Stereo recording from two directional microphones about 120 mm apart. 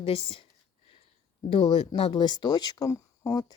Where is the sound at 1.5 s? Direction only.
50° left (ahead or behind).